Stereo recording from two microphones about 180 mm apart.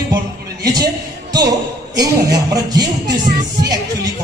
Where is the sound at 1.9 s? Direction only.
20° right (ahead or behind).